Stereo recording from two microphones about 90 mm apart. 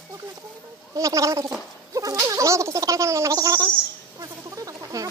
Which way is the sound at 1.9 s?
40° right (ahead or behind).